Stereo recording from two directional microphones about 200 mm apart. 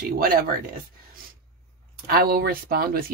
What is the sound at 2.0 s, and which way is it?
Speech, 50° right (ahead or behind).